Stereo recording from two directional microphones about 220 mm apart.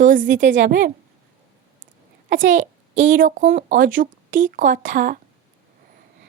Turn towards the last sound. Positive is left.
turn(degrees=-35)  # may be behind; listen again after turning